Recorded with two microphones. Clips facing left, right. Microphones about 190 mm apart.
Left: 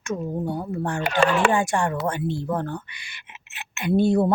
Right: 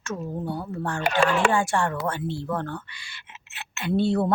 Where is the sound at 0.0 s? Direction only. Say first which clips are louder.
Left 4 dB; 15° left (ahead or behind).